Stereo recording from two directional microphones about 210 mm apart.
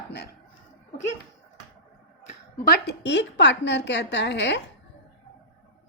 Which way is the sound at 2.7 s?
55° left (ahead or behind).